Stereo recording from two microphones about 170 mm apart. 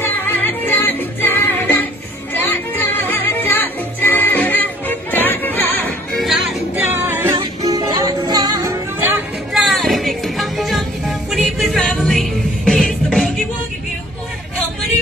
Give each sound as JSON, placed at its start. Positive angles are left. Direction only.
{"t": 0.0, "sound": "music", "side_deg": 10}
{"t": 6.1, "sound": "music", "side_deg": 0}
{"t": 6.9, "sound": "music", "side_deg": -15}
{"t": 9.5, "sound": "music", "side_deg": 0}